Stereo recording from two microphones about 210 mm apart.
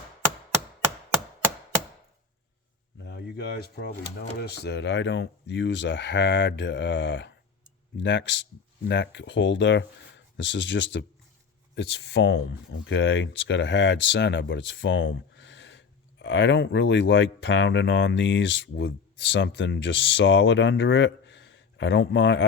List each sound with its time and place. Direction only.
3.0 s speech: 50° left (ahead or behind)